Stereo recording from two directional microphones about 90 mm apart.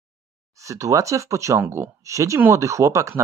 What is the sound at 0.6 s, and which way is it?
Speech, 35° right (ahead or behind).